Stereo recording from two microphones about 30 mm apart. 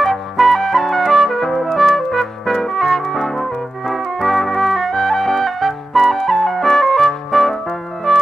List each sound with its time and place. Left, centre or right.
0.0 s music: centre